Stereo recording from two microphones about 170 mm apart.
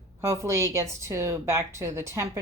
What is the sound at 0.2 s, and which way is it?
A woman's voice, 15° right (ahead or behind).